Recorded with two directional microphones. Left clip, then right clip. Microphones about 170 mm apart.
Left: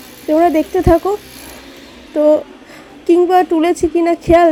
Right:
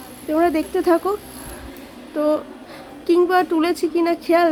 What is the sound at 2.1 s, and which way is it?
A woman's voice, 20° left (ahead or behind).